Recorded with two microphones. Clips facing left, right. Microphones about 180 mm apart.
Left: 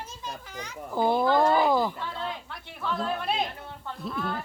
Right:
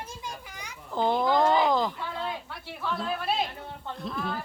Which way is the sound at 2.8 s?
Centre (ahead or behind).